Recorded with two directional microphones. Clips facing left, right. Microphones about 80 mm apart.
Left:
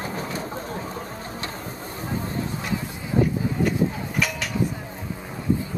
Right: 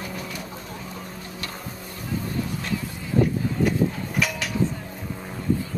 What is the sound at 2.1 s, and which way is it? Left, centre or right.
Vehicle, left.